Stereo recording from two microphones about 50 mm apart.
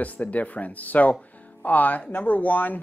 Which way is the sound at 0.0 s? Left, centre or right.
Left.